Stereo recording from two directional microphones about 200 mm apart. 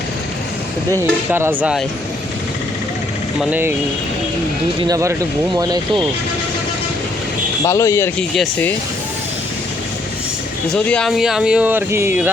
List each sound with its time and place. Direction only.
1.3 s speech: 10° right (ahead or behind)
3.5 s speech: 10° right (ahead or behind)
4.8 s speech: 15° right (ahead or behind)
7.6 s speech: 15° left (ahead or behind)
10.8 s speech: 5° left (ahead or behind)